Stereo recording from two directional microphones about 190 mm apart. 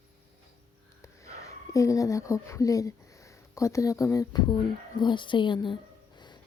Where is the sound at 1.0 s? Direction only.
15° left (ahead or behind).